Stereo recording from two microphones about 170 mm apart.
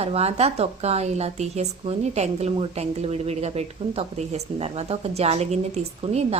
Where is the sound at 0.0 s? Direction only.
35° right (ahead or behind).